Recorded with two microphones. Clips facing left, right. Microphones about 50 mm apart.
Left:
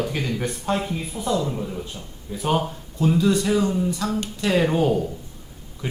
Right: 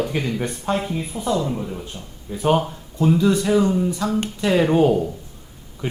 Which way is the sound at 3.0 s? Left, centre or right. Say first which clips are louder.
Right 2 dB; centre.